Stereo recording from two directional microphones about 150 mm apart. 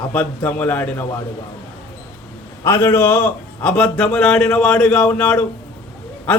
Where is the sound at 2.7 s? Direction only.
15° left (ahead or behind).